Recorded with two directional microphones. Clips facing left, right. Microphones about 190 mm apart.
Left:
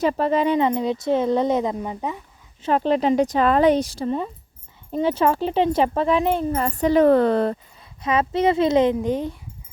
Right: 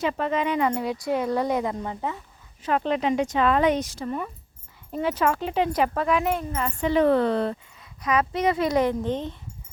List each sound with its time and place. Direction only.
0.0 s a woman's voice: 35° left (ahead or behind); by 2.1 s 15° left (ahead or behind)
2.6 s speech: 35° left (ahead or behind)
8.0 s a woman's voice: 25° left (ahead or behind); by 9.3 s 10° left (ahead or behind)